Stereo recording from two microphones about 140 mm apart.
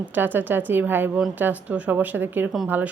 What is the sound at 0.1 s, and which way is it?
A woman's voice, 15° right (ahead or behind).